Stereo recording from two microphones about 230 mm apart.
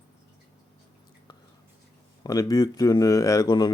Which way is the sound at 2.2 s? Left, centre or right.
Centre.